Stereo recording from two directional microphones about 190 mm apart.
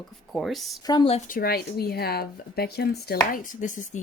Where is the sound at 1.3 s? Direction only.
50° left (ahead or behind).